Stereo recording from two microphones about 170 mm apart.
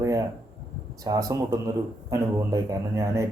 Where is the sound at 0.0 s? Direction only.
20° right (ahead or behind).